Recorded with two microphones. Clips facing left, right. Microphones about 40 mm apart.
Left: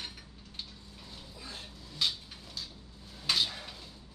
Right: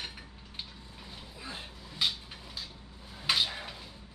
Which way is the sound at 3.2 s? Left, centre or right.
Centre.